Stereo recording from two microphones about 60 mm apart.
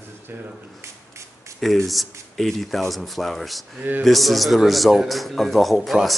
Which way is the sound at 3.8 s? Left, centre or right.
Right.